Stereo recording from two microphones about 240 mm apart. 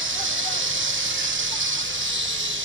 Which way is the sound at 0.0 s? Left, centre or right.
Right.